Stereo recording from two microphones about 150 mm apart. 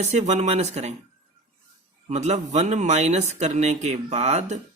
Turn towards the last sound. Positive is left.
turn(degrees=-50)  # may be behind; listen again after turning